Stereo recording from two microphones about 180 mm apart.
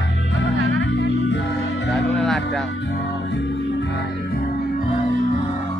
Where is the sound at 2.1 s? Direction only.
Centre (ahead or behind).